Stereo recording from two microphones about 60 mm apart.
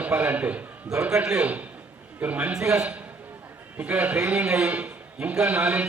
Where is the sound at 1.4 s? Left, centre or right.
Right.